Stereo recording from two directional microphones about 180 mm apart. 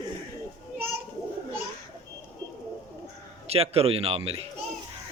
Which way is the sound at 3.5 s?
35° right (ahead or behind).